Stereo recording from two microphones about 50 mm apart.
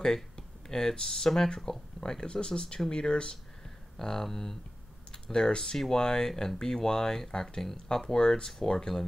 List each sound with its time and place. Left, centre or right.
0.0 s speech: centre